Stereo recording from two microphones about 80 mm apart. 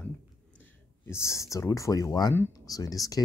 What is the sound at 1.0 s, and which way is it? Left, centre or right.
Speech, left.